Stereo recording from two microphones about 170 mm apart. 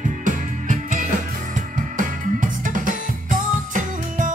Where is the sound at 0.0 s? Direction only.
50° right (ahead or behind).